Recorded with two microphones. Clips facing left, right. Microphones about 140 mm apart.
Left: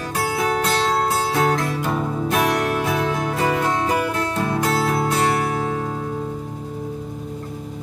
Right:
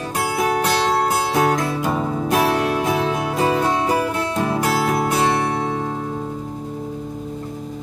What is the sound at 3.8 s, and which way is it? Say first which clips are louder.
Music: right 1 dB; 30° right (ahead or behind).